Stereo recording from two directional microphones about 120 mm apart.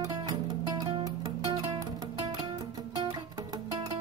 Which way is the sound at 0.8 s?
40° right (ahead or behind).